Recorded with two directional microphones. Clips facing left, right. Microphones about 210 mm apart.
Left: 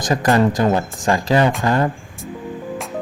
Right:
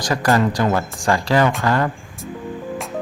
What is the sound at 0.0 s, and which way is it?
Speech, 20° left (ahead or behind).